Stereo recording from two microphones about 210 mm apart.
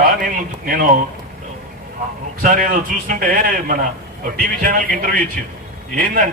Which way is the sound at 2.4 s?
40° right (ahead or behind).